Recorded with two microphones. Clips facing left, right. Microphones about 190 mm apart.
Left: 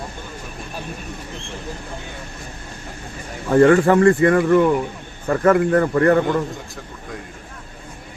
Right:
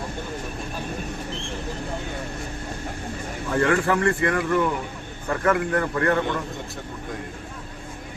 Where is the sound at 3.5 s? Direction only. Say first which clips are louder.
Left 9 dB; 40° left (ahead or behind).